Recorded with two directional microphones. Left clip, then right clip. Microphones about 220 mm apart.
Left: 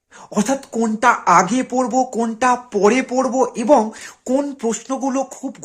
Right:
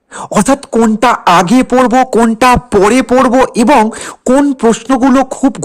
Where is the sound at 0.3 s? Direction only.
45° right (ahead or behind).